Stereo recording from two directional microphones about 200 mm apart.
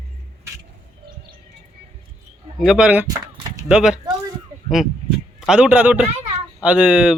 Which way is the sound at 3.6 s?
5° right (ahead or behind).